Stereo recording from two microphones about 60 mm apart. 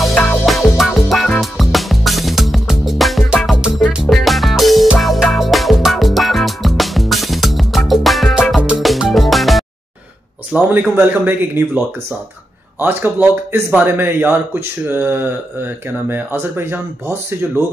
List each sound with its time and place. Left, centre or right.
0.5 s music: centre
8.5 s music: centre
8.8 s music: centre
10.7 s speech: right
12.8 s speech: right